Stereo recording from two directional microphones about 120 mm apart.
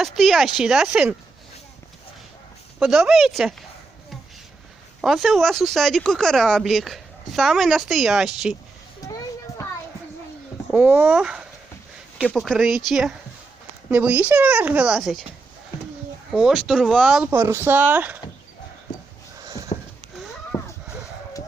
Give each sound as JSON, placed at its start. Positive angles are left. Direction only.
{"t": 0.0, "sound": "speech", "side_deg": 0}
{"t": 2.7, "sound": "speech", "side_deg": -5}
{"t": 4.9, "sound": "speech", "side_deg": 0}
{"t": 9.0, "sound": "a sound", "side_deg": 30}
{"t": 10.7, "sound": "speech", "side_deg": -15}
{"t": 13.9, "sound": "speech", "side_deg": -15}
{"t": 16.3, "sound": "speech", "side_deg": -5}
{"t": 17.3, "sound": "speech", "side_deg": -20}
{"t": 19.7, "sound": "a sound", "side_deg": 70}
{"t": 20.5, "sound": "a sound", "side_deg": 25}